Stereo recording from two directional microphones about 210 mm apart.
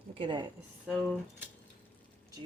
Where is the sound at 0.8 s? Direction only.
Centre (ahead or behind).